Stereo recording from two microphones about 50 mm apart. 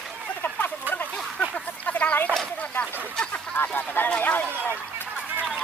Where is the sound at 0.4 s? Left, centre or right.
Left.